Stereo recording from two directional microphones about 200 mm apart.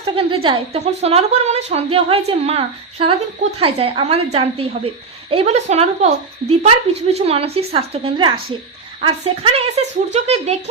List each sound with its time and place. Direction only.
0.4 s a woman's voice: 25° right (ahead or behind)